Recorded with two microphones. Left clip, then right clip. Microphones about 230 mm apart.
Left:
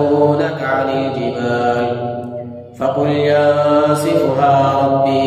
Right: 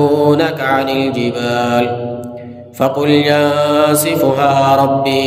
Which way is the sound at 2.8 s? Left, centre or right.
Right.